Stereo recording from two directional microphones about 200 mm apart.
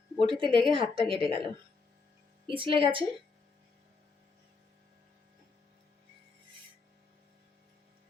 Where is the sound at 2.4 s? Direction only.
25° right (ahead or behind).